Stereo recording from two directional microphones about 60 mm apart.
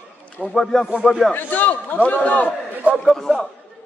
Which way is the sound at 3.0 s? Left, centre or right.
Centre.